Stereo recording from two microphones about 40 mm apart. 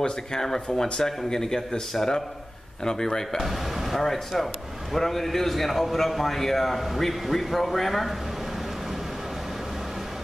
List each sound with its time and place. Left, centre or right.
0.0 s speech: centre
3.3 s a man's voice: centre